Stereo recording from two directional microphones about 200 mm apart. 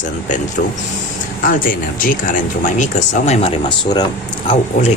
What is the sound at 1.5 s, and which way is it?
Speech, 45° left (ahead or behind).